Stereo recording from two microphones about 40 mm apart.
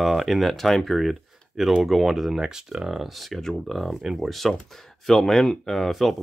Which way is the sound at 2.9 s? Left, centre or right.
Centre.